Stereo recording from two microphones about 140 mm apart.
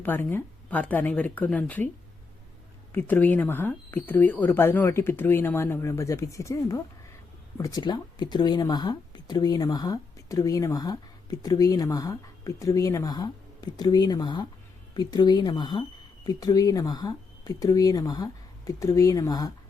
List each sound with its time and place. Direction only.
0.0 s speech: 15° left (ahead or behind)
2.9 s speech: 15° left (ahead or behind)